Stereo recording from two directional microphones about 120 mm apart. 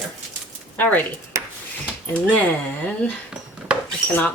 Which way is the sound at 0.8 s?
10° left (ahead or behind).